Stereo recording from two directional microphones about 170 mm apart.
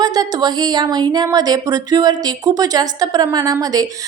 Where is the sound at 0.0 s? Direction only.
25° right (ahead or behind).